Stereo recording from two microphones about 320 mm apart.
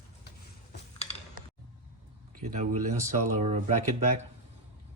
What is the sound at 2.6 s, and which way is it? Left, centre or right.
Speech, right.